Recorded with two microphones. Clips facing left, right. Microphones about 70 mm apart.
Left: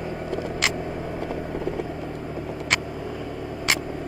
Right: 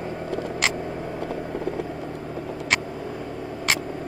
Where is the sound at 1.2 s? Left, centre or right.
Left.